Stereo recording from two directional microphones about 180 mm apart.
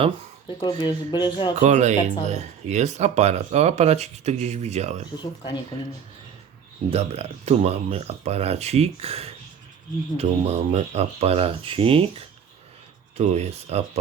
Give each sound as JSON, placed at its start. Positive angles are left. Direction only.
{"t": 0.4, "sound": "speech", "side_deg": 25}
{"t": 1.5, "sound": "speech", "side_deg": -40}
{"t": 5.2, "sound": "speech", "side_deg": 25}
{"t": 6.9, "sound": "speech", "side_deg": -35}